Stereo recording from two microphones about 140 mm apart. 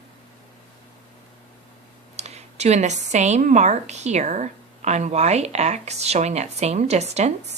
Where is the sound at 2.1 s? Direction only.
50° right (ahead or behind).